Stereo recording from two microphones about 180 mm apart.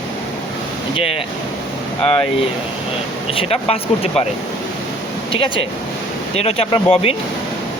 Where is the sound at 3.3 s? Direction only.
35° left (ahead or behind).